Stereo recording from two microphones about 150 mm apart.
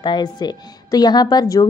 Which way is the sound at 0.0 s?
30° left (ahead or behind).